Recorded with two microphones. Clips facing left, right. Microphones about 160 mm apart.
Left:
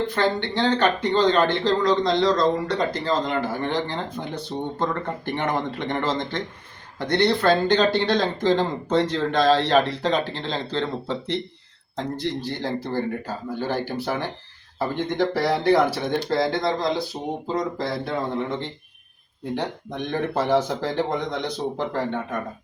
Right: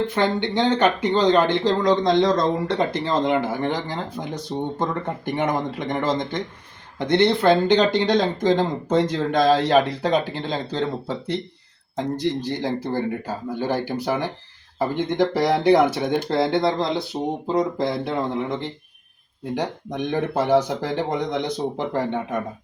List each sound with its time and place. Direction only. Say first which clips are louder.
0.1 s speech: right 2 dB; 15° right (ahead or behind)
12.4 s speech: right 2 dB; 15° right (ahead or behind)
19.5 s speech: right 3 dB; 10° right (ahead or behind)